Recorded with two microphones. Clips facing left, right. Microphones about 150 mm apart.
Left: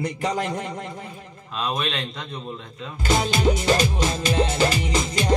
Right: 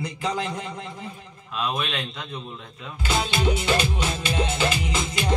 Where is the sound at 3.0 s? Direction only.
40° left (ahead or behind).